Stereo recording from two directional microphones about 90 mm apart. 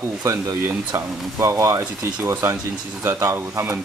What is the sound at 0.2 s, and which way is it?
Speech, 35° right (ahead or behind).